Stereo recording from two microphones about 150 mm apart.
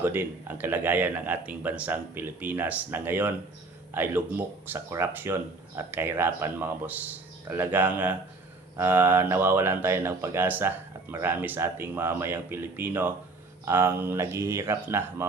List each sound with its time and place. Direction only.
0.0 s speech: 15° right (ahead or behind)